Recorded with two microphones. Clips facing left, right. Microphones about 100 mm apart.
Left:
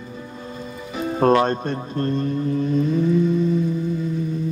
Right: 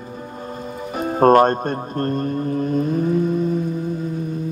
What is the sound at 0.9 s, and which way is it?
Speech, 45° right (ahead or behind).